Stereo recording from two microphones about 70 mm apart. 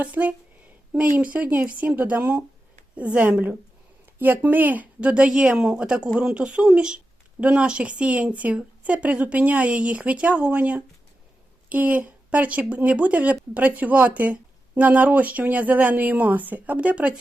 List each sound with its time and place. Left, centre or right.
0.0 s a woman's voice: right